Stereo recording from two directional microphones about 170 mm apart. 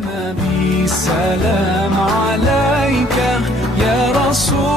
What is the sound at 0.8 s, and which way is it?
Music, centre (ahead or behind).